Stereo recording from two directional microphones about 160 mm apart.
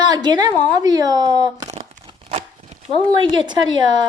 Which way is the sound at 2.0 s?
35° right (ahead or behind).